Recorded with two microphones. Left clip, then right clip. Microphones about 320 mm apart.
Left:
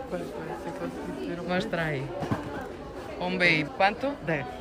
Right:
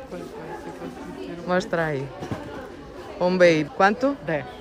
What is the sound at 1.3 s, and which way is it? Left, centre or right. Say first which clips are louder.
Speech: right 6 dB; centre.